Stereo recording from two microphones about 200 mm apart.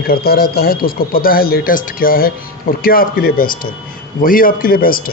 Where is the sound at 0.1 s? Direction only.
50° left (ahead or behind).